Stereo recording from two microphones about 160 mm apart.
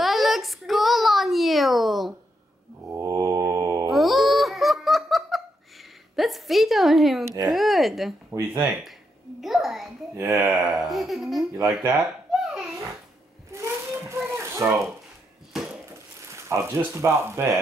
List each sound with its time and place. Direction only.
0.0 s a sound: centre (ahead or behind)
2.9 s mantra: 15° right (ahead or behind)
3.9 s giggle: centre (ahead or behind)
7.4 s speech: centre (ahead or behind)
8.3 s speech: 20° right (ahead or behind)
9.4 s a sound: centre (ahead or behind)
10.1 s speech: 15° right (ahead or behind)
10.9 s speech: centre (ahead or behind)
11.8 s speech: 15° right (ahead or behind)
12.3 s laughter: centre (ahead or behind)
13.5 s a sound: 15° right (ahead or behind)
15.5 s dishes: 5° right (ahead or behind)
16.3 s speech: 15° right (ahead or behind)